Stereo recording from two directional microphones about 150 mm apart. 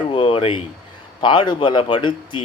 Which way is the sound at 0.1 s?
35° left (ahead or behind).